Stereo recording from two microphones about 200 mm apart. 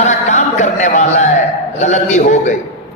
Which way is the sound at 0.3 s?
35° left (ahead or behind).